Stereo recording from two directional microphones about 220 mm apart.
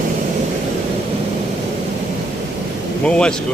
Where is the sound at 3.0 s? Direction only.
5° left (ahead or behind).